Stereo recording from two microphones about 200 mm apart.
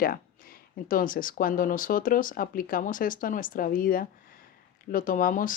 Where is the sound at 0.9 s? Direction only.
45° left (ahead or behind).